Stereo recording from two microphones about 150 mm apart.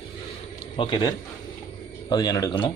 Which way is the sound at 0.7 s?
35° left (ahead or behind).